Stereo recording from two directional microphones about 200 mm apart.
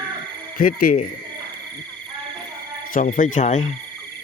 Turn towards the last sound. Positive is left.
turn(degrees=35)  # may be behind; listen again after turning